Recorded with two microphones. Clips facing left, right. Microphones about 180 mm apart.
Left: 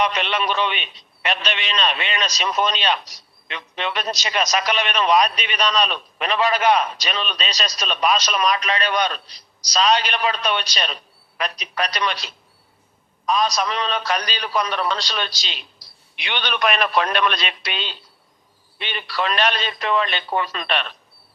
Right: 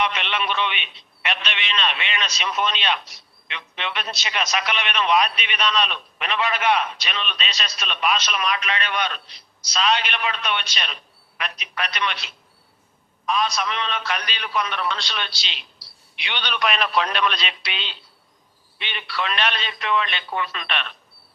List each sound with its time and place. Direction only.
0.0 s a man's voice: 40° left (ahead or behind)